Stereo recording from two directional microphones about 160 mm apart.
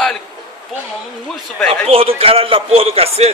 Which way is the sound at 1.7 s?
35° right (ahead or behind).